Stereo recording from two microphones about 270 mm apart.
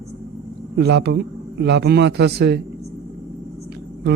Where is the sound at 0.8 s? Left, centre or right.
Right.